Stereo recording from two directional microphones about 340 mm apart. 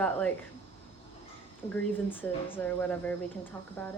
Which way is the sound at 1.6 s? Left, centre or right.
Centre.